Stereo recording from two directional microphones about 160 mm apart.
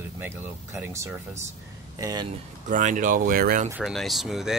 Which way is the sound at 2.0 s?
25° right (ahead or behind).